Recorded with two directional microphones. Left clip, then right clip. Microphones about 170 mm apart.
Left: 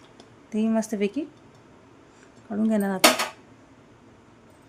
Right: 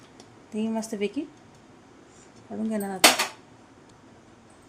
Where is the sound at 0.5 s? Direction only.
25° left (ahead or behind).